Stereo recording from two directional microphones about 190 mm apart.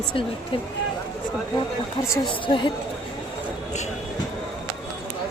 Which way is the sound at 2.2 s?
25° left (ahead or behind).